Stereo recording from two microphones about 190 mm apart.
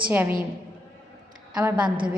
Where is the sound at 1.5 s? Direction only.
10° right (ahead or behind).